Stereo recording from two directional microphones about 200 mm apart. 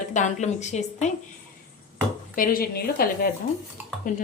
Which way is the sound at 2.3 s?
45° left (ahead or behind).